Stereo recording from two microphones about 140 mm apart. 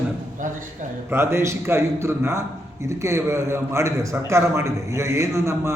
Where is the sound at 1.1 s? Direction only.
15° right (ahead or behind).